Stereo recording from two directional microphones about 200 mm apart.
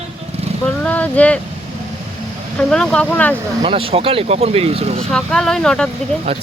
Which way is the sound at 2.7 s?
5° left (ahead or behind).